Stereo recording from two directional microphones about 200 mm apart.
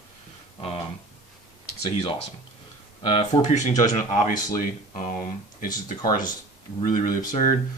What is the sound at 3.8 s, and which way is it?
Speech, 40° left (ahead or behind).